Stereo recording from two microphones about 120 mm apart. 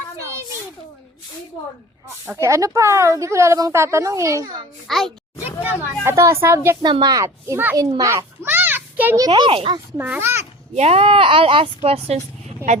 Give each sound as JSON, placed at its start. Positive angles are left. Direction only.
{"t": 2.2, "sound": "speech", "side_deg": -20}
{"t": 4.9, "sound": "speech", "side_deg": 0}
{"t": 6.0, "sound": "speech", "side_deg": -20}
{"t": 6.8, "sound": "a child's voice", "side_deg": -35}
{"t": 9.1, "sound": "a child's voice", "side_deg": -35}
{"t": 10.0, "sound": "speech", "side_deg": -20}
{"t": 10.8, "sound": "a woman's voice", "side_deg": -55}